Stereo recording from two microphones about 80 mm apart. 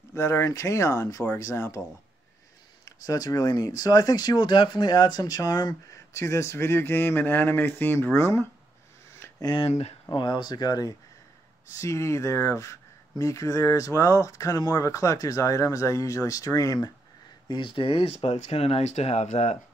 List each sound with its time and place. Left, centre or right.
0.1 s speech: left
2.8 s speech: left
6.1 s speech: left
9.4 s speech: left
11.7 s speech: left
17.5 s speech: left